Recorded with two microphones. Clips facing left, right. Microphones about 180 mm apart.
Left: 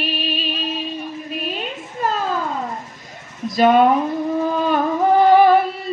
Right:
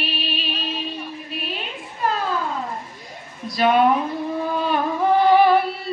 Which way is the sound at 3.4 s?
45° left (ahead or behind).